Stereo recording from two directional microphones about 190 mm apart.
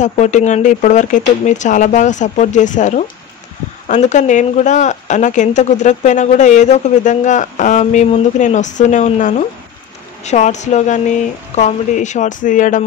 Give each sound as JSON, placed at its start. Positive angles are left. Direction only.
{"t": 0.0, "sound": "speech", "side_deg": 40}